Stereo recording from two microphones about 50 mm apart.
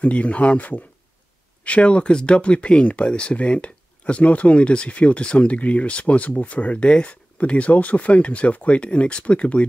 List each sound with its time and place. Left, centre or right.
0.0 s speech: left